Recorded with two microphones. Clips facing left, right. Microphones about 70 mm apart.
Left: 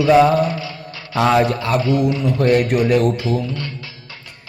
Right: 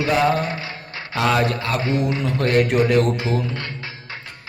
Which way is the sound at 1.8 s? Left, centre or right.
Right.